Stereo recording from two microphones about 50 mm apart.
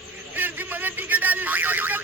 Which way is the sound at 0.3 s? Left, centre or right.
Right.